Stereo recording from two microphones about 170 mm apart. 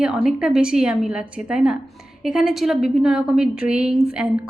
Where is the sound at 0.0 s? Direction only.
5° right (ahead or behind).